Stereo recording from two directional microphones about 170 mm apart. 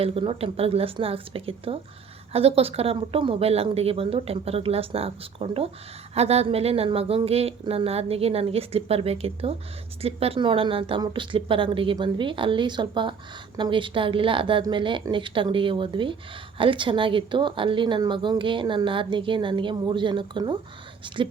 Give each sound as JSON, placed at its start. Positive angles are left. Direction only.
{"t": 0.0, "sound": "a woman's voice", "side_deg": -35}